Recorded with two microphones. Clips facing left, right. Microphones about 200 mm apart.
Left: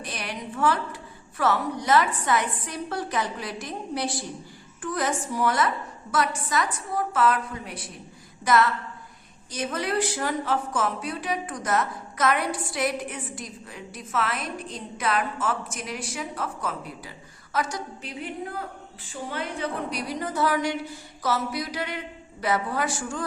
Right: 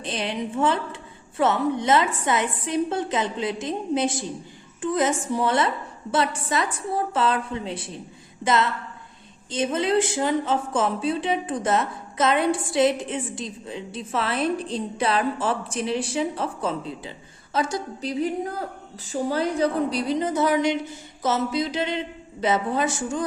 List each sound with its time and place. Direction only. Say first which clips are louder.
0.0 s a woman's voice: right 6 dB; 25° right (ahead or behind)